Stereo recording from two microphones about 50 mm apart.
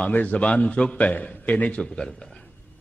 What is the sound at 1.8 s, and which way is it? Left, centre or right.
Speech, centre.